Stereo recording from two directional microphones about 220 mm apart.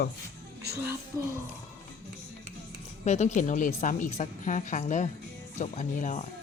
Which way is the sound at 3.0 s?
30° left (ahead or behind).